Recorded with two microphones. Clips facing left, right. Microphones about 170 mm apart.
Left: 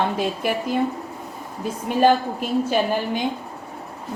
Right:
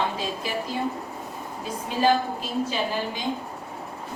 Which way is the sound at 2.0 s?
55° left (ahead or behind).